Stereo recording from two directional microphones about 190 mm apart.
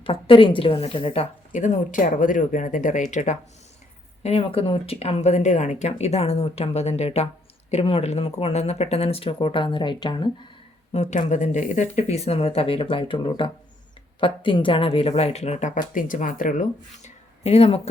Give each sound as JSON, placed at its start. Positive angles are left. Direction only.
{"t": 0.0, "sound": "a woman's voice", "side_deg": 25}
{"t": 10.9, "sound": "a woman's voice", "side_deg": 35}